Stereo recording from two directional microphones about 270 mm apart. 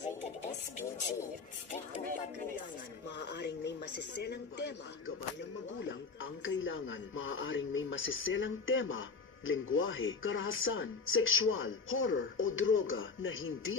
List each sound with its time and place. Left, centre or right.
3.2 s a sound: left
6.2 s music: left
9.5 s speech: left